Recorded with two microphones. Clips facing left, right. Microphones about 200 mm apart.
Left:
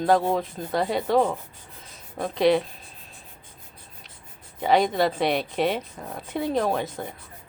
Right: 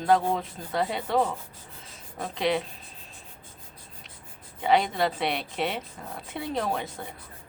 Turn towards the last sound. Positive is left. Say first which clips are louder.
# left 5 dB
turn(degrees=40)  # may be behind; listen again after turning